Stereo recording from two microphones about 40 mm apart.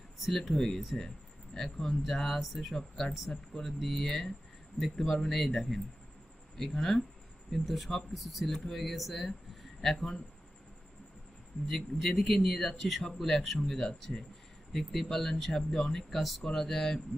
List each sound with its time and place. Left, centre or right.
0.3 s speech: centre
8.5 s speech: centre
8.8 s speech: centre
11.7 s speech: centre
16.4 s speech: centre